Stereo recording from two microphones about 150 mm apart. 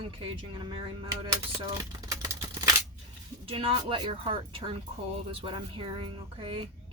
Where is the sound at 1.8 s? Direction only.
25° right (ahead or behind).